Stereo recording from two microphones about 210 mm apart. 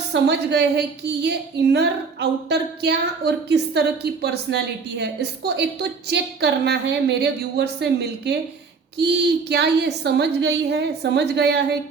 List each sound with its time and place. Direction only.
0.1 s a woman's voice: 50° right (ahead or behind)